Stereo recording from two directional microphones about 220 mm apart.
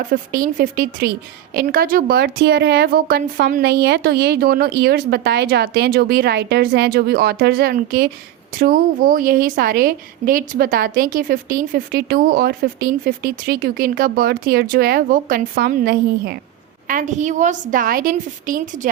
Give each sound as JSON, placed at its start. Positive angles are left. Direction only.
{"t": 0.0, "sound": "a woman's voice", "side_deg": -40}
{"t": 16.9, "sound": "a woman's voice", "side_deg": -35}